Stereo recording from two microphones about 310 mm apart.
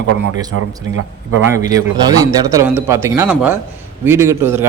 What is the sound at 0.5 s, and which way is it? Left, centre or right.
Speech, right.